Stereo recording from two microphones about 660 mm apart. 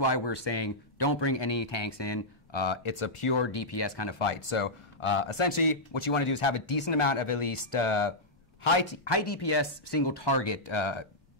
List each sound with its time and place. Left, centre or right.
0.0 s speech: left